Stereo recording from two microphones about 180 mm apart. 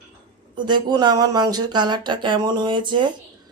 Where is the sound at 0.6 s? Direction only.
25° right (ahead or behind).